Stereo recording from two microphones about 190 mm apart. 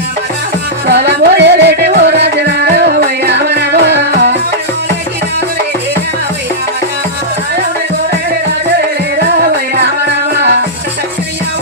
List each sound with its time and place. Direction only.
0.8 s music: 60° right (ahead or behind)
9.4 s music: 60° right (ahead or behind)